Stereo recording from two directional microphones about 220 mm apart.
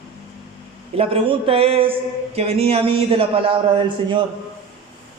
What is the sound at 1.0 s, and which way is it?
A man's voice, 25° right (ahead or behind).